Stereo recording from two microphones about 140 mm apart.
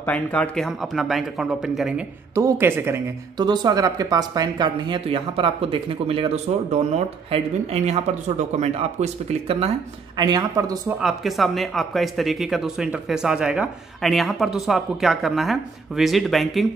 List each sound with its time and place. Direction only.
0.0 s speech: 10° left (ahead or behind)
2.3 s speech: 20° right (ahead or behind)
3.3 s speech: 30° right (ahead or behind); by 9.7 s 45° right (ahead or behind)
10.1 s speech: 30° right (ahead or behind)
10.9 s speech: 5° right (ahead or behind)